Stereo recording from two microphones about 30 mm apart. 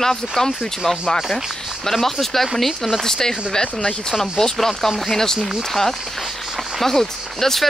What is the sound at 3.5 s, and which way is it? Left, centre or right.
Speech, left.